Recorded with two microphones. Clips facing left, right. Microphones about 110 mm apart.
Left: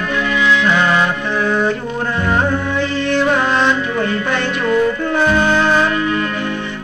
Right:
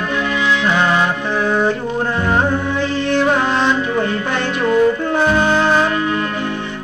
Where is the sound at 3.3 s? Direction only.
30° right (ahead or behind).